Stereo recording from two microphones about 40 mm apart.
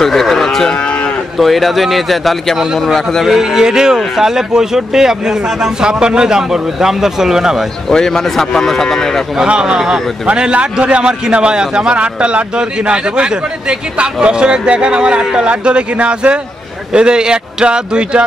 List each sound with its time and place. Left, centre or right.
0.0 s a man's voice: centre
7.9 s speech: centre
9.5 s a man's voice: right